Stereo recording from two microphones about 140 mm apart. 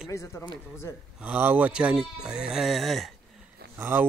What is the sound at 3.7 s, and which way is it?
Speech, 15° right (ahead or behind).